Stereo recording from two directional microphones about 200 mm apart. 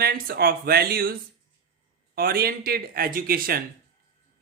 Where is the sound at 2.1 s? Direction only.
50° right (ahead or behind).